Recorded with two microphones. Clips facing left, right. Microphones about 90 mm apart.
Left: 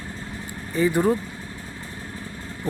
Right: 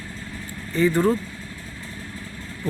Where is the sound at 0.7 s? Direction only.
15° left (ahead or behind).